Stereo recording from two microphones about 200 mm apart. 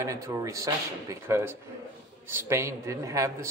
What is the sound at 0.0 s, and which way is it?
A man's voice, 15° right (ahead or behind).